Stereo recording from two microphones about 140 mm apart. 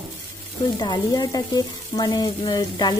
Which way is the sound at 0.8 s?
30° left (ahead or behind).